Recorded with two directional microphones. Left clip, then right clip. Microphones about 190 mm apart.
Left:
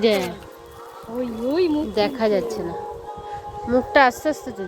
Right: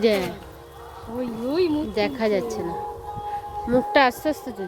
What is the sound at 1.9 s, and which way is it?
Speech, 10° right (ahead or behind).